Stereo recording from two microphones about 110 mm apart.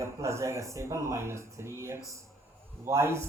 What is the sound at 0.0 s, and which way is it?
A man's voice, 25° right (ahead or behind).